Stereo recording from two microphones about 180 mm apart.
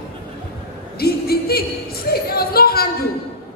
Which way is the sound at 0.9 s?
60° left (ahead or behind).